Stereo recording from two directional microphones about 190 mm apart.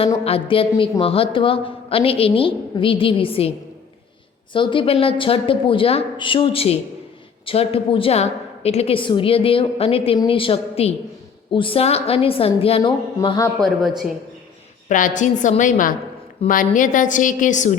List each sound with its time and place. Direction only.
0.3 s a woman's voice: 30° left (ahead or behind)
4.5 s a woman's voice: 25° left (ahead or behind)
13.1 s a woman's voice: 20° left (ahead or behind)
14.8 s a woman's voice: 40° left (ahead or behind)